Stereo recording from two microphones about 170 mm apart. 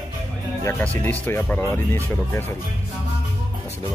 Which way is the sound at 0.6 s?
10° left (ahead or behind).